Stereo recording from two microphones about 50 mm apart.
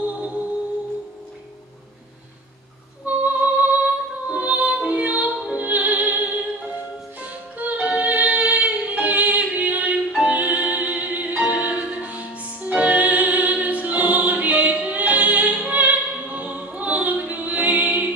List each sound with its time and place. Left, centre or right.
0.0 s music: right
3.1 s music: right
9.5 s singing: right
10.2 s opera: right